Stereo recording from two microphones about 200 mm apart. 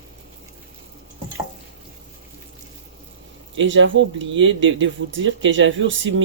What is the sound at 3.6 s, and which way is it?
Speech, 70° right (ahead or behind).